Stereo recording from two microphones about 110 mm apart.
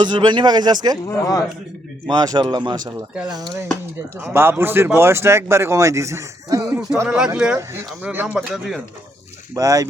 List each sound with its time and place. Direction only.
0.0 s speech: 45° right (ahead or behind)
1.0 s speech: 30° left (ahead or behind)
2.0 s speech: 40° right (ahead or behind)
4.2 s speech: 20° right (ahead or behind)
6.7 s speech: 15° right (ahead or behind)
8.5 s speech: 5° right (ahead or behind)
9.6 s speech: 30° right (ahead or behind)